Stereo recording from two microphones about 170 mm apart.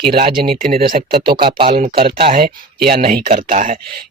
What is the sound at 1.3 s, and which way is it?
Speech, 30° right (ahead or behind).